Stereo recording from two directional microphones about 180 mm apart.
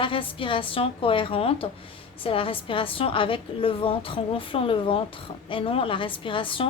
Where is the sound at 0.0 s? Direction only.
30° left (ahead or behind).